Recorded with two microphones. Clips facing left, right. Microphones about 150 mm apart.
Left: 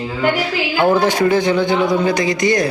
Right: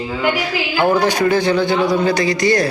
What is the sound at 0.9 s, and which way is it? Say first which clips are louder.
A man's voice: even; 25° left (ahead or behind).